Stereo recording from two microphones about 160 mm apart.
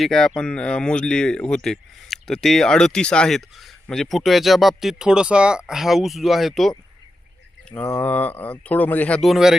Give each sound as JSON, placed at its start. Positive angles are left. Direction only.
{"t": 0.0, "sound": "speech", "side_deg": 5}
{"t": 7.8, "sound": "speech", "side_deg": 15}